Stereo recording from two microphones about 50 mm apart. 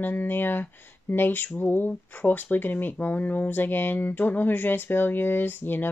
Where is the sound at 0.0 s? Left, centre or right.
Left.